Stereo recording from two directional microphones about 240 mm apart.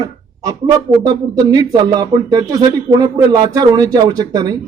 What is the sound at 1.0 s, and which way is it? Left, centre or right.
Speech, centre.